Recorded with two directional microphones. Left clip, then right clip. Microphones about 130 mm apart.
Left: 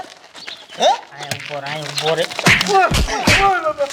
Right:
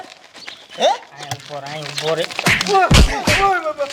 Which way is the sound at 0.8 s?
50° right (ahead or behind).